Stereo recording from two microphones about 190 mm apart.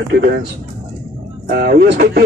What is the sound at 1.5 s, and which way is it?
Speech, 55° right (ahead or behind).